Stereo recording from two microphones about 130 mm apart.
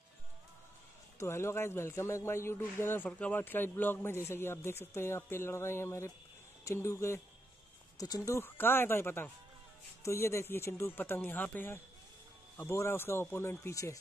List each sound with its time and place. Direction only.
1.2 s a man's voice: 20° left (ahead or behind)